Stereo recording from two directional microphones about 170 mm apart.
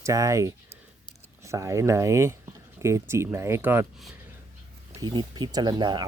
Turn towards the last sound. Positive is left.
turn(degrees=-25)  # may be behind; listen again after turning